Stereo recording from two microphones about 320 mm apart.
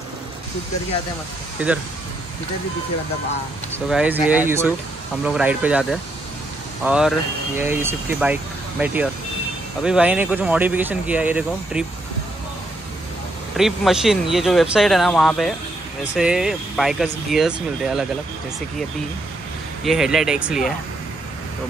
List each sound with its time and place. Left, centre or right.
3.9 s speech: centre
13.6 s speech: centre
19.8 s speech: centre